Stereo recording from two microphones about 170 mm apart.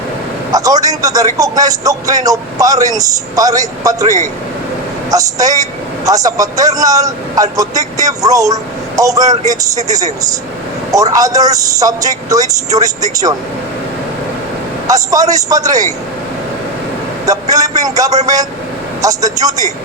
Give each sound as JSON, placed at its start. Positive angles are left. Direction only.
{"t": 0.5, "sound": "speech", "side_deg": -20}
{"t": 14.8, "sound": "speech", "side_deg": -20}
{"t": 17.5, "sound": "vehicle", "side_deg": -20}
{"t": 19.0, "sound": "speech", "side_deg": -20}